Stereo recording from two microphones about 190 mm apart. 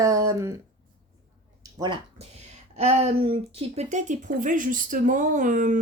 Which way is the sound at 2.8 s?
35° right (ahead or behind).